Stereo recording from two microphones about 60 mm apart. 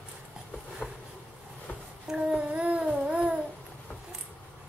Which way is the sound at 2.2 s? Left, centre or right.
Centre.